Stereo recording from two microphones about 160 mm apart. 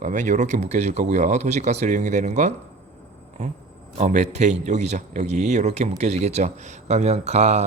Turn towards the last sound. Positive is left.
turn(degrees=-45)  # may be behind; listen again after turning